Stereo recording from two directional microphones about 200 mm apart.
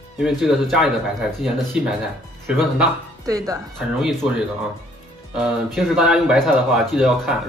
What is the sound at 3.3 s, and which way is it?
Speech, 15° right (ahead or behind).